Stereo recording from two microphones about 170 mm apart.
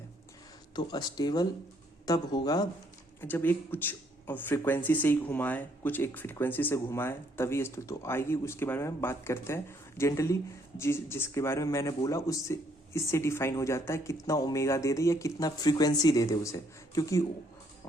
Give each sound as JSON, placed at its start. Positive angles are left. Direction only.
{"t": 0.8, "sound": "speech", "side_deg": 25}
{"t": 3.2, "sound": "speech", "side_deg": 10}